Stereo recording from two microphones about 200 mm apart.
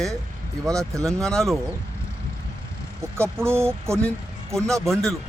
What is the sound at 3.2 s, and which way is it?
Speech, 10° right (ahead or behind).